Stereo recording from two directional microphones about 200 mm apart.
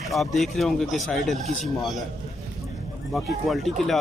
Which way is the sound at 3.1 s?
Centre (ahead or behind).